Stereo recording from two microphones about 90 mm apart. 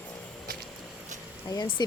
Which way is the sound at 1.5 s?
45° left (ahead or behind).